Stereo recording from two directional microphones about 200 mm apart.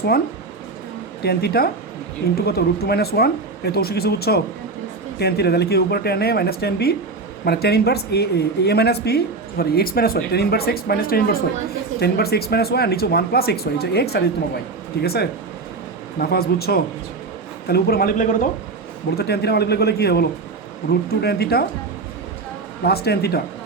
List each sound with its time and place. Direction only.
1.2 s speech: 50° left (ahead or behind)
19.1 s speech: 55° left (ahead or behind)
22.8 s speech: 50° left (ahead or behind)